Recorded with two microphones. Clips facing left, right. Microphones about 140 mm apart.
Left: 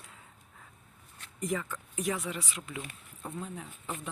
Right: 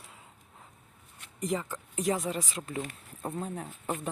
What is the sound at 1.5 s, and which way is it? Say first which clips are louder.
Speech: right 2 dB; 30° right (ahead or behind).